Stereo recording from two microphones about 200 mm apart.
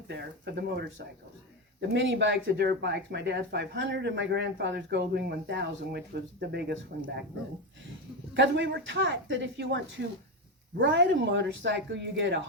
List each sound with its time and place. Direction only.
0.1 s speech: 55° right (ahead or behind)
8.3 s speech: 65° right (ahead or behind)